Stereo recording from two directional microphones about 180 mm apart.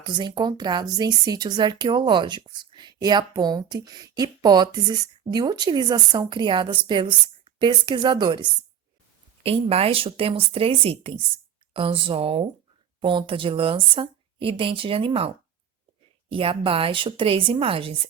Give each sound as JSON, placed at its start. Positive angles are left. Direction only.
{"t": 0.0, "sound": "speech", "side_deg": -25}
{"t": 16.3, "sound": "speech", "side_deg": -30}